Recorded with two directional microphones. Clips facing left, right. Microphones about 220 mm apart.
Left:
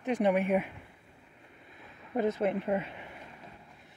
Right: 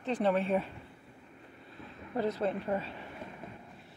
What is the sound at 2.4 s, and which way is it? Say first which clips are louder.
Speech: left 3 dB; 20° left (ahead or behind).